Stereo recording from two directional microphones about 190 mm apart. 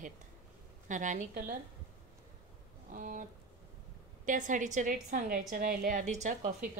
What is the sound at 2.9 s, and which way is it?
Speech, 45° right (ahead or behind).